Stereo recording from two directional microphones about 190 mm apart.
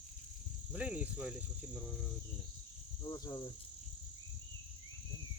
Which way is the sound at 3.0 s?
20° left (ahead or behind).